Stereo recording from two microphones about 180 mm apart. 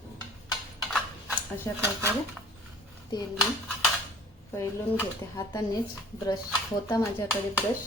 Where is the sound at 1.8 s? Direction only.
15° right (ahead or behind).